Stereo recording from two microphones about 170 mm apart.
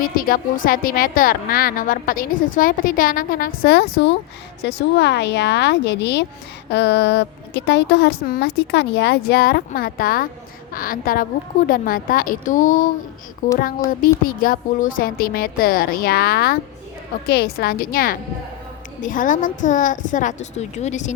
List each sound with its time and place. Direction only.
0.0 s a woman's voice: 55° left (ahead or behind)
3.9 s a woman's voice: 90° left; by 21.1 s 45° left (ahead or behind)